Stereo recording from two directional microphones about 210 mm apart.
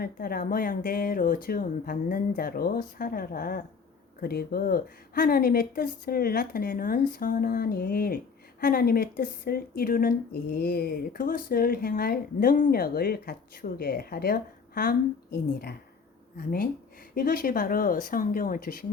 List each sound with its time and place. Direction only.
0.0 s speech: 45° left (ahead or behind)
17.2 s speech: 45° left (ahead or behind)